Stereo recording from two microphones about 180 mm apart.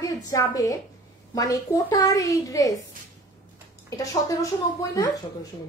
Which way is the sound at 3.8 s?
20° left (ahead or behind).